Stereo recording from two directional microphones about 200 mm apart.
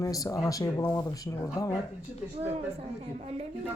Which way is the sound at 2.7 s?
30° right (ahead or behind).